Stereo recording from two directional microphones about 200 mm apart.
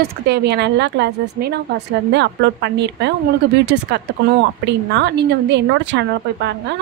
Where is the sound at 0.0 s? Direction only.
55° right (ahead or behind).